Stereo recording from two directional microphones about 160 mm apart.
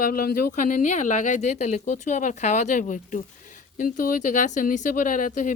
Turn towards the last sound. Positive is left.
turn(degrees=55)  # may be behind; listen again after turning